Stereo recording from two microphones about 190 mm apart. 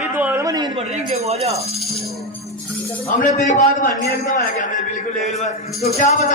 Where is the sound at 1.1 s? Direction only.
35° right (ahead or behind).